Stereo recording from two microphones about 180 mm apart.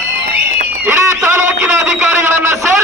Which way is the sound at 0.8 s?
15° right (ahead or behind).